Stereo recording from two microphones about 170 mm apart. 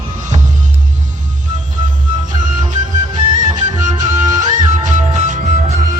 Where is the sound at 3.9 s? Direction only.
45° right (ahead or behind).